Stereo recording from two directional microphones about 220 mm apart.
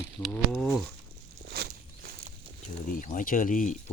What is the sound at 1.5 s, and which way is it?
Walk, 45° right (ahead or behind).